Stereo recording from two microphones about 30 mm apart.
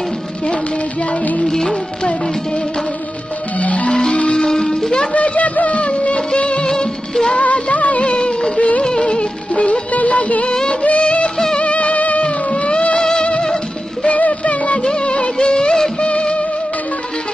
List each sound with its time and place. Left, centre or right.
1.4 s music: centre
3.5 s music: left
4.1 s music: left
4.5 s music: centre
5.1 s music of bollywood: left
6.7 s music: left
7.3 s music: left
8.5 s music: left
8.8 s music: left
9.6 s music: left
12.2 s music: left
13.0 s music: left
14.0 s a sound: left
14.9 s music: left